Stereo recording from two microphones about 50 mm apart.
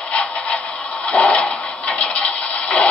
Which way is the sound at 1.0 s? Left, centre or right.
Left.